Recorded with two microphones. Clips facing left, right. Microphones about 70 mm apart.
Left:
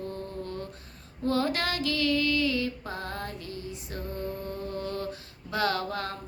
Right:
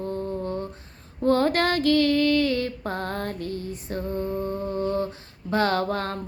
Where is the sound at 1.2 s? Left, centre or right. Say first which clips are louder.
Right 7 dB; right.